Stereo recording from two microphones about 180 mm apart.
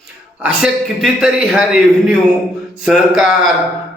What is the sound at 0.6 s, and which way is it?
A man's voice, centre (ahead or behind).